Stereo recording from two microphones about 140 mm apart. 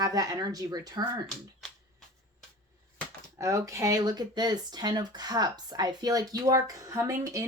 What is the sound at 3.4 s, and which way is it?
Speech, 25° right (ahead or behind).